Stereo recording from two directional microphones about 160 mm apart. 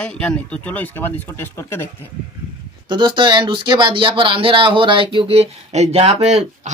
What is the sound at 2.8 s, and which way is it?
Speech, 30° right (ahead or behind).